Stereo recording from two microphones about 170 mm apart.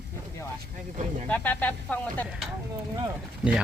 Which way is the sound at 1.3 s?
10° left (ahead or behind).